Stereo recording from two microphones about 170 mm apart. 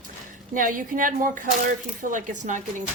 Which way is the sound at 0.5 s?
50° right (ahead or behind).